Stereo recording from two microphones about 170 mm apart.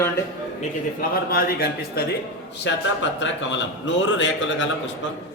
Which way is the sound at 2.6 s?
90° left.